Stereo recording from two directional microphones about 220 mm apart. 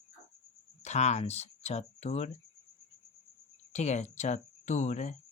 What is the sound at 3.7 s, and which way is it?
Speech, 30° left (ahead or behind).